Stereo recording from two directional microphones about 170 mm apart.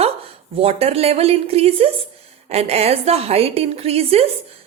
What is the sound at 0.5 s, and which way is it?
A woman's voice, 35° right (ahead or behind).